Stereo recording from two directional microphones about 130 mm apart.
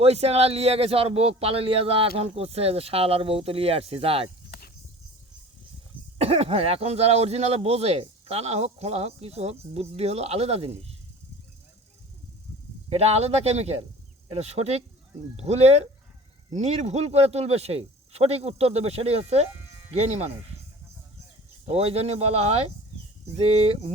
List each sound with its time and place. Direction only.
0.0 s speech: 55° right (ahead or behind)
6.1 s speech: 50° right (ahead or behind)
12.9 s speech: 55° right (ahead or behind)
21.7 s speech: 50° right (ahead or behind)